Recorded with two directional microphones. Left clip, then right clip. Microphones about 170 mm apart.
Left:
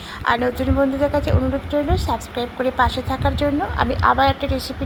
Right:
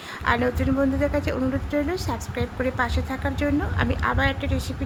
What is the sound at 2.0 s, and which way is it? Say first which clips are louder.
Speech: left 7 dB; 40° right (ahead or behind).